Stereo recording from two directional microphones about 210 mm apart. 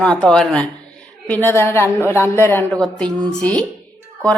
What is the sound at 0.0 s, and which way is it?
A woman's voice, 5° left (ahead or behind).